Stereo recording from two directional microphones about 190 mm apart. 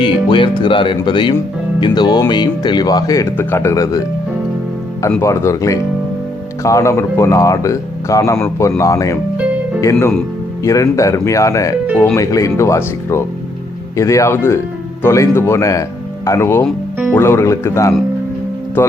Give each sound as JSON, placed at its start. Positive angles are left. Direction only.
{"t": 0.0, "sound": "speech", "side_deg": 25}
{"t": 5.1, "sound": "speech", "side_deg": 15}
{"t": 10.6, "sound": "speech", "side_deg": 15}